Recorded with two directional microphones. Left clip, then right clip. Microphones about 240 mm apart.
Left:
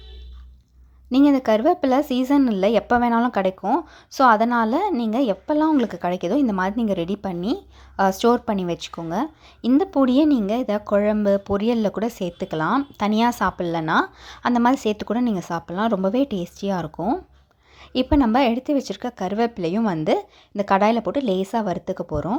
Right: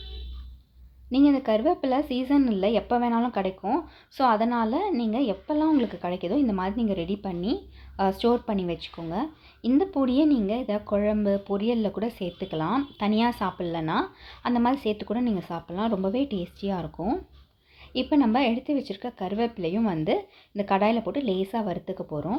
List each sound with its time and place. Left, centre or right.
1.1 s speech: left